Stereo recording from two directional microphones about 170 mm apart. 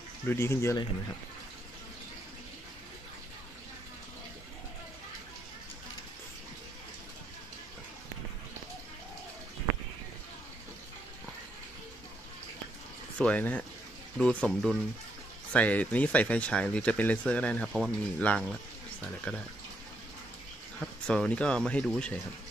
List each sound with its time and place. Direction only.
0.3 s speech: 15° left (ahead or behind)
13.2 s speech: 10° left (ahead or behind)
20.8 s speech: 5° left (ahead or behind)